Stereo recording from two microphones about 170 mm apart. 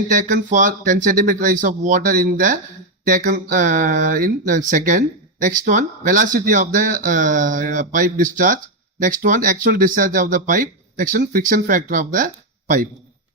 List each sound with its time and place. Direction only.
0.1 s speech: 50° right (ahead or behind)